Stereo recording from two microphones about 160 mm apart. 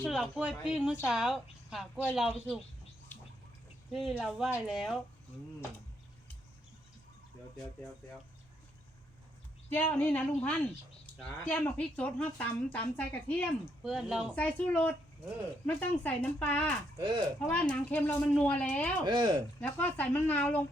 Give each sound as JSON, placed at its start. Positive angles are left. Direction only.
{"t": 0.1, "sound": "a woman's voice", "side_deg": -5}
{"t": 4.1, "sound": "a woman's voice", "side_deg": -5}
{"t": 9.6, "sound": "speech", "side_deg": 10}
{"t": 14.3, "sound": "speech", "side_deg": 10}
{"t": 17.0, "sound": "speech", "side_deg": -25}
{"t": 17.5, "sound": "speech", "side_deg": 10}
{"t": 19.0, "sound": "speech", "side_deg": -25}
{"t": 19.6, "sound": "speech", "side_deg": 10}